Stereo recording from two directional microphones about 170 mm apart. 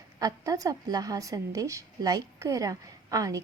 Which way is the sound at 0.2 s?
20° right (ahead or behind).